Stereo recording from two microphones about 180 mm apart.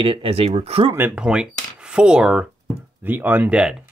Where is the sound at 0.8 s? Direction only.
10° right (ahead or behind).